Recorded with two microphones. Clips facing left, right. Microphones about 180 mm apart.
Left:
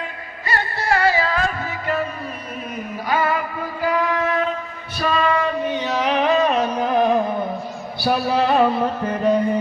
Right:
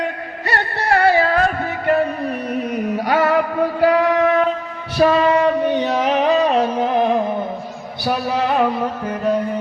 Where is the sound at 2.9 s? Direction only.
75° right (ahead or behind); by 9.3 s 5° right (ahead or behind).